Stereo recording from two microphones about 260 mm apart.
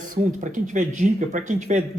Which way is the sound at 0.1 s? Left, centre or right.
Right.